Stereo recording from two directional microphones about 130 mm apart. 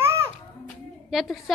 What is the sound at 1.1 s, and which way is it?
Speech, centre (ahead or behind).